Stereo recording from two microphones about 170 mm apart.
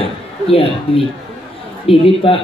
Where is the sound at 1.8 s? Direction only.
35° left (ahead or behind).